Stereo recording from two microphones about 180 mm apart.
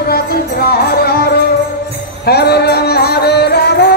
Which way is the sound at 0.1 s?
60° left (ahead or behind).